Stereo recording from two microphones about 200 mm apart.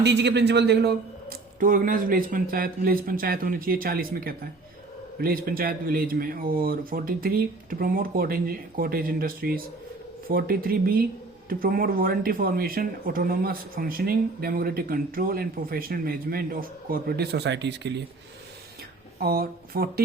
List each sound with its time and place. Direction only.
0.0 s speech: 60° right (ahead or behind)
19.2 s speech: 50° right (ahead or behind)